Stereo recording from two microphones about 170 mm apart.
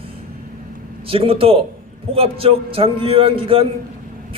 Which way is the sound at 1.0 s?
30° right (ahead or behind).